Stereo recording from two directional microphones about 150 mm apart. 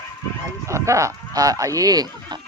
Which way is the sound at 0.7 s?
20° right (ahead or behind).